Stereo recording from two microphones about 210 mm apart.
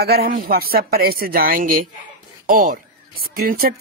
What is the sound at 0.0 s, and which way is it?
Speech, 45° right (ahead or behind).